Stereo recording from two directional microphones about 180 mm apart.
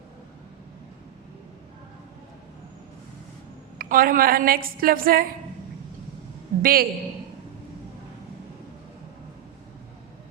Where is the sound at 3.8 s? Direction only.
55° right (ahead or behind).